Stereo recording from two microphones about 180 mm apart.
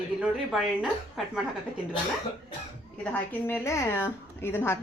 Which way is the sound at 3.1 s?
10° left (ahead or behind).